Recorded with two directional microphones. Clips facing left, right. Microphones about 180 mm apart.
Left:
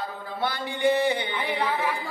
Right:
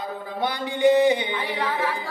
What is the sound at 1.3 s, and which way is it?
Speech, 15° left (ahead or behind).